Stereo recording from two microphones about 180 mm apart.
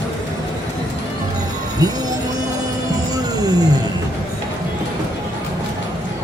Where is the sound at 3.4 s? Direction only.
20° right (ahead or behind).